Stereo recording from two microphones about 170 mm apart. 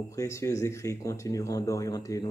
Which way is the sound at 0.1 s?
15° left (ahead or behind).